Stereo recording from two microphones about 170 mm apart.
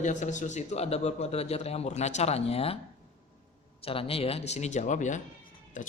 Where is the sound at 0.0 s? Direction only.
45° left (ahead or behind).